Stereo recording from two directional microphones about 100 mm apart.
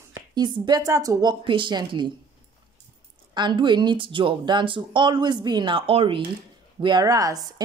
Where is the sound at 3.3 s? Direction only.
45° right (ahead or behind).